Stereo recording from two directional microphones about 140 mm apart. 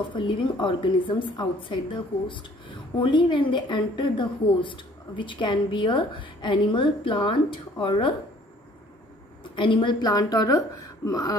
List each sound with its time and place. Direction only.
0.1 s a woman's voice: 35° left (ahead or behind)
9.4 s a woman's voice: 35° left (ahead or behind)